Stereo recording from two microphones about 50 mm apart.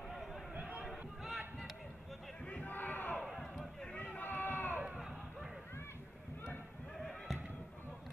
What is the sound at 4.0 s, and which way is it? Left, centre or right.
Run, left.